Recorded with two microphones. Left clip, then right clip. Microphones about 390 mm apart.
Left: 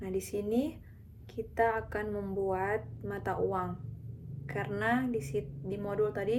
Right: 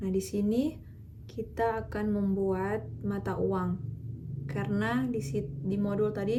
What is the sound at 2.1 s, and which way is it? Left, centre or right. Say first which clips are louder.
Speech: right 3 dB; left.